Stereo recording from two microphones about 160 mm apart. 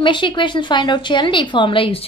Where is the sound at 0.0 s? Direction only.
30° left (ahead or behind).